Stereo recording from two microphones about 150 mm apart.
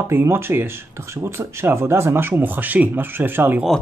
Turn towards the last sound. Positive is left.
turn(degrees=-15)  # may be behind; listen again after turning